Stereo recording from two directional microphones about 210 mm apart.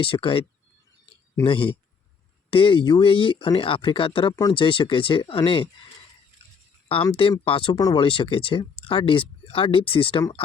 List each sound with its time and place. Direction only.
0.0 s speech: 25° left (ahead or behind)